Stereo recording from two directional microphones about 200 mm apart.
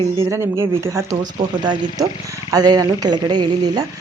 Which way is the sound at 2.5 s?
20° right (ahead or behind).